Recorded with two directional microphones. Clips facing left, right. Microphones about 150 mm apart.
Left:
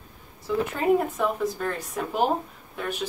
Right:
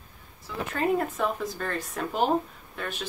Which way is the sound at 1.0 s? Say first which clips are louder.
Left 3 dB; 10° left (ahead or behind).